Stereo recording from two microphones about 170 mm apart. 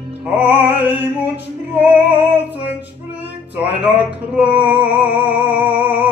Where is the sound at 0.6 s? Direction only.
80° left.